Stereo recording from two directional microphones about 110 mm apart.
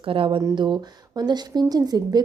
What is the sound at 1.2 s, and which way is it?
A woman's voice, 40° right (ahead or behind).